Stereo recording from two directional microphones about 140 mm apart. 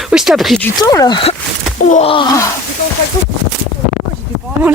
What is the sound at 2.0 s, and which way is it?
Speech, 35° left (ahead or behind).